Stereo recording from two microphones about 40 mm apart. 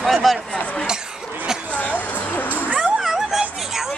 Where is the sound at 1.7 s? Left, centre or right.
Left.